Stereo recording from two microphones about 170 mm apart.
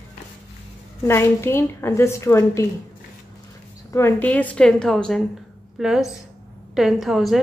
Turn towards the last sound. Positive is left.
turn(degrees=0)  # may be behind; listen again after turning